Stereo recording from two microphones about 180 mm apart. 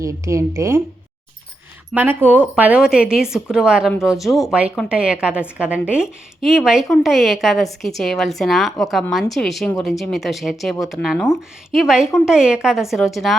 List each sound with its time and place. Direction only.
0.0 s speech: 15° right (ahead or behind)
1.9 s a woman's voice: 10° right (ahead or behind)